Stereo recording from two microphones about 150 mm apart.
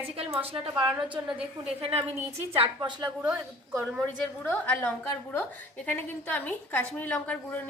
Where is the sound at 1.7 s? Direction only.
40° right (ahead or behind).